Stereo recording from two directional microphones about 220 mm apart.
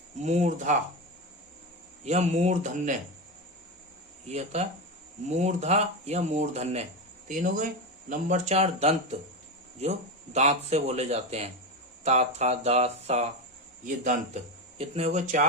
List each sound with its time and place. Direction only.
0.2 s speech: 30° right (ahead or behind)
2.0 s speech: 30° right (ahead or behind)
4.3 s speech: 30° right (ahead or behind)
10.3 s speech: 30° right (ahead or behind)